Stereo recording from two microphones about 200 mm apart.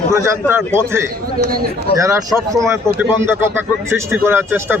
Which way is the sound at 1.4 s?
50° right (ahead or behind).